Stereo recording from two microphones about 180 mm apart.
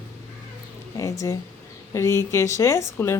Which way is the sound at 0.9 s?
20° left (ahead or behind).